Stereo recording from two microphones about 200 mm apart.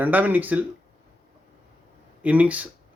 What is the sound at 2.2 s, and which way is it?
Speech, 5° right (ahead or behind).